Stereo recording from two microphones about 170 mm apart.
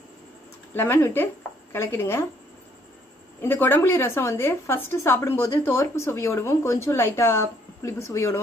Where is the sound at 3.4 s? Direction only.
15° left (ahead or behind).